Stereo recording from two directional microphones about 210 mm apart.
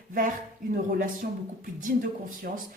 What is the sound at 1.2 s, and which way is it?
Speech, 45° right (ahead or behind).